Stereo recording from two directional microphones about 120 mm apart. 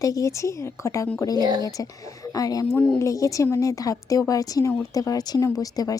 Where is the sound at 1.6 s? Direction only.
30° left (ahead or behind).